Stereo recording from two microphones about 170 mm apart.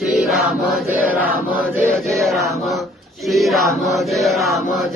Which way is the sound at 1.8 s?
Centre (ahead or behind).